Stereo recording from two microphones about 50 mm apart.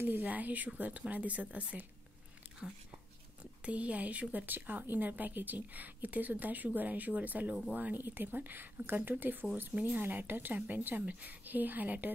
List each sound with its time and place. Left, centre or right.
0.0 s speech: right
3.6 s speech: right